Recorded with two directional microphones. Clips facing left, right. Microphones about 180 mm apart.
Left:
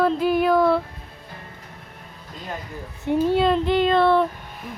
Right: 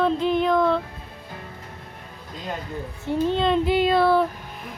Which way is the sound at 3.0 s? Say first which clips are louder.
Left 3 dB; 15° left (ahead or behind).